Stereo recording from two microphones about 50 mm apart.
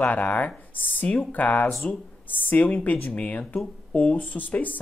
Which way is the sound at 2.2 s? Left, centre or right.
Left.